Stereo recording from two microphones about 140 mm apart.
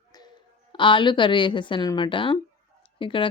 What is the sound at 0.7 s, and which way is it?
Speech, 35° left (ahead or behind).